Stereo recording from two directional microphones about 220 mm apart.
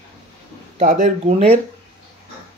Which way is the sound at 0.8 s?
30° right (ahead or behind).